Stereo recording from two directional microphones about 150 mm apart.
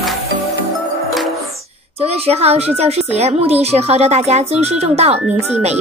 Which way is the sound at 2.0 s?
45° right (ahead or behind).